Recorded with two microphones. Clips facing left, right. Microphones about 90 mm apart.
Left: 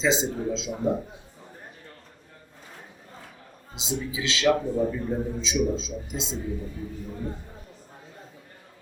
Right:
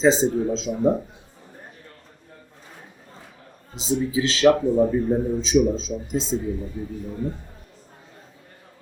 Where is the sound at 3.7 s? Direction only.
40° right (ahead or behind).